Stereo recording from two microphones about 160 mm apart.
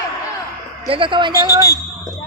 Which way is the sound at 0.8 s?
35° right (ahead or behind).